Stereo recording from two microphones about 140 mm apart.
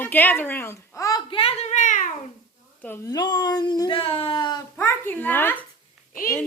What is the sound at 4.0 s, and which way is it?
Speech, 40° left (ahead or behind).